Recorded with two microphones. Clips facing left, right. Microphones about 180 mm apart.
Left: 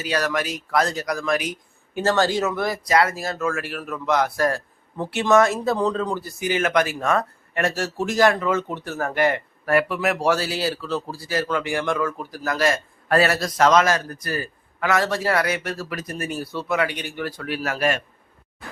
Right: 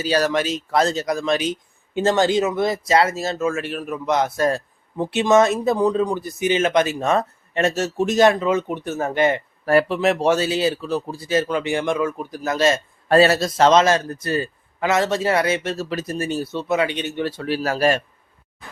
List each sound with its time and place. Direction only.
0.0 s speech: 30° right (ahead or behind)